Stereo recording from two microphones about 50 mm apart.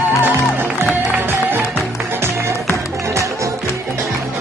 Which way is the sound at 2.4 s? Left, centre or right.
Right.